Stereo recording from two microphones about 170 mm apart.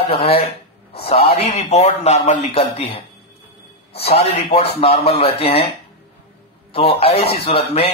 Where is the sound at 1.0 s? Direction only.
35° left (ahead or behind).